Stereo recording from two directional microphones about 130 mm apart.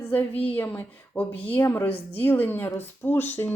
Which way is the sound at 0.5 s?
15° left (ahead or behind).